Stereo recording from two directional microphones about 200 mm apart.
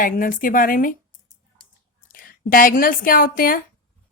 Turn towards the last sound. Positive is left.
turn(degrees=45)  # may be behind; listen again after turning